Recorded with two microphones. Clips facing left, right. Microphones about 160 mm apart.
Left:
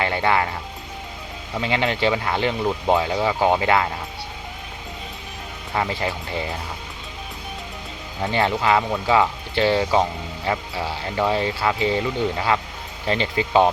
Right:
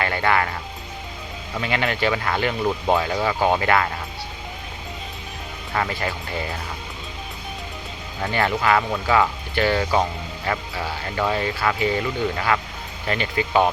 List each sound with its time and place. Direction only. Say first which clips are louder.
0.0 s speech: left 1 dB; 20° left (ahead or behind)
1.6 s speech: left 2 dB; 20° left (ahead or behind)
5.9 s speech: left 1 dB; 20° left (ahead or behind)
8.2 s speech: left 1 dB; 20° left (ahead or behind)